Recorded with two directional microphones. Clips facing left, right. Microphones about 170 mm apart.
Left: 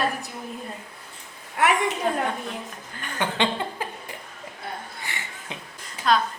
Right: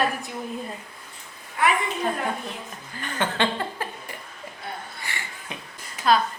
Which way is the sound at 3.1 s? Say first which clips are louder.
Even; 15° left (ahead or behind).